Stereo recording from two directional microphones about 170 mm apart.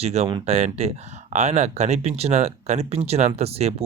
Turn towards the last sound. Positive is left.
turn(degrees=-35)  # may be behind; listen again after turning